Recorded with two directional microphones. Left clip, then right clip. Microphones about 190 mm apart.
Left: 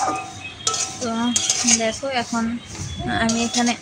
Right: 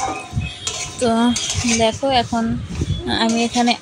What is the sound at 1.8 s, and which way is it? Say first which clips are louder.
A child's voice: right 6 dB; 20° right (ahead or behind).